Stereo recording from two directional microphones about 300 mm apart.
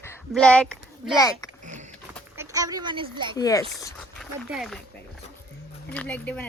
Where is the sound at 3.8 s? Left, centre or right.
Centre.